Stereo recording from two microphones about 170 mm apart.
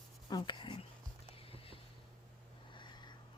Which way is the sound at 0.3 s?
25° left (ahead or behind).